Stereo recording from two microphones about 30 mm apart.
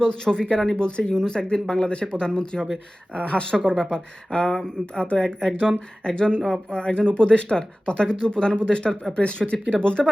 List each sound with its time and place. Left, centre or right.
0.0 s speech: left
1.1 s speech: left
3.2 s speech: left
3.5 s speech: left
6.7 s speech: left
9.4 s speech: centre
9.8 s speech: left